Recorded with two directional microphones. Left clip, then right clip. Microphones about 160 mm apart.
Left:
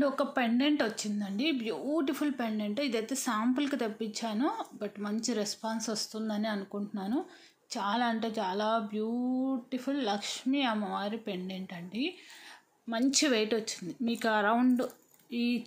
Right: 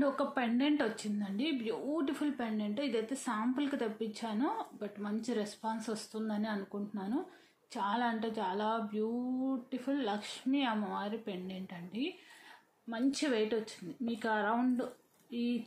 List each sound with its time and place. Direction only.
0.0 s a woman's voice: 30° left (ahead or behind)
12.9 s speech: 45° left (ahead or behind)